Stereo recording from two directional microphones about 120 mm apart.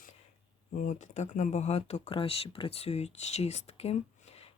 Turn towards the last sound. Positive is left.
turn(degrees=60)  # may be behind; listen again after turning